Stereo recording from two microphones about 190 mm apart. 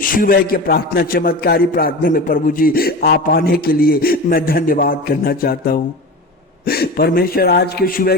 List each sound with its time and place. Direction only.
0.0 s a man's voice: 45° left (ahead or behind)